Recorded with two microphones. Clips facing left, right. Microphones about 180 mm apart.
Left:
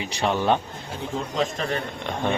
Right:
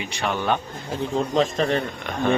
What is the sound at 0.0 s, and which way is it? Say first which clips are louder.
Speech: left 2 dB; 35° left (ahead or behind).